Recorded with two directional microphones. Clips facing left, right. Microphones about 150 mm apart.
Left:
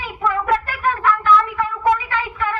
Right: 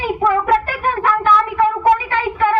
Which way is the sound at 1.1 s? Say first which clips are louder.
Right 1 dB; 30° right (ahead or behind).